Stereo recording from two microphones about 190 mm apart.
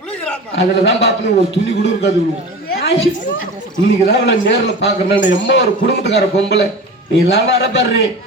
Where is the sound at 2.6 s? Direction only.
55° left (ahead or behind).